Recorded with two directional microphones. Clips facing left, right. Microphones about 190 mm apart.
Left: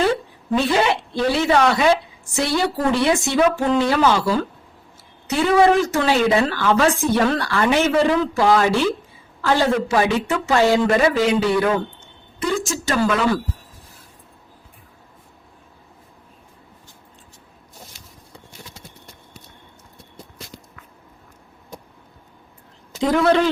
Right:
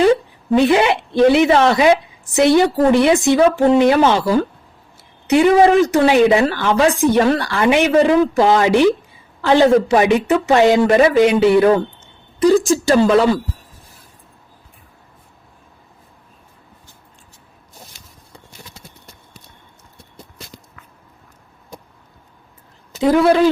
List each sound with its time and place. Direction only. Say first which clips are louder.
0.5 s a woman's voice: right 5 dB; 20° right (ahead or behind)
12.4 s speech: right 10 dB; 35° right (ahead or behind)
23.0 s speech: right 4 dB; 5° right (ahead or behind)